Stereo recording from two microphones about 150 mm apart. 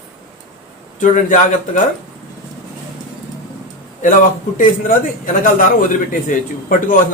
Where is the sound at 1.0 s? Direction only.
60° left (ahead or behind).